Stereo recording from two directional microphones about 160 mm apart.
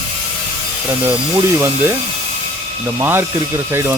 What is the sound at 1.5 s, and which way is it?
Speech, 15° right (ahead or behind).